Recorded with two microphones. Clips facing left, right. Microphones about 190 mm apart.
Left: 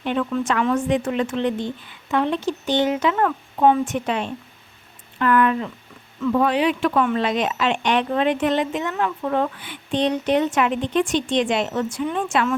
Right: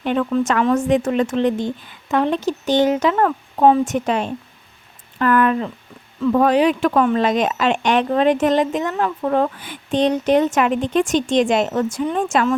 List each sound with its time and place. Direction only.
0.0 s speech: 45° right (ahead or behind)